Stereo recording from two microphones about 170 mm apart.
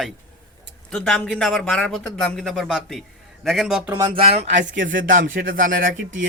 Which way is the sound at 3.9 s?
20° right (ahead or behind).